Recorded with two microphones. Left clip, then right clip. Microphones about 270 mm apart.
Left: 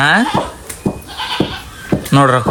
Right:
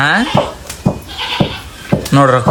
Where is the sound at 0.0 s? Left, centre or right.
Centre.